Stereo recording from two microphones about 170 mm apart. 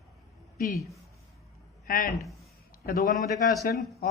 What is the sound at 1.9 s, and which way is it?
A man's voice, 50° left (ahead or behind).